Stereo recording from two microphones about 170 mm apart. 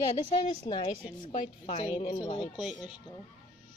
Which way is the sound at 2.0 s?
30° left (ahead or behind).